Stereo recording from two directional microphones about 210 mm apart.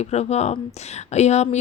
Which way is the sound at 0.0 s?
30° left (ahead or behind).